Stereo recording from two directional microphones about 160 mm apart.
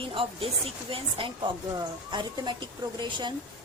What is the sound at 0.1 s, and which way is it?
A woman's voice, 35° right (ahead or behind).